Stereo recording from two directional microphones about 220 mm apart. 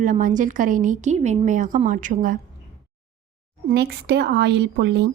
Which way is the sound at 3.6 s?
45° right (ahead or behind).